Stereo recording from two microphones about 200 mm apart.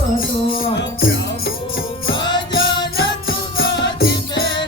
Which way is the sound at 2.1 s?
20° left (ahead or behind).